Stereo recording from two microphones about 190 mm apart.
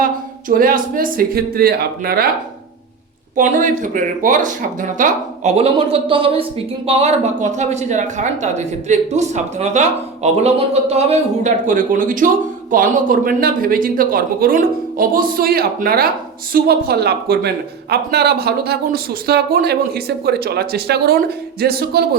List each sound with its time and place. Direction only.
0.0 s speech: 50° right (ahead or behind)
3.3 s speech: 45° right (ahead or behind)